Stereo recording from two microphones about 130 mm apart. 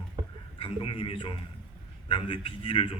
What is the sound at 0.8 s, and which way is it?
A man's voice, 45° left (ahead or behind).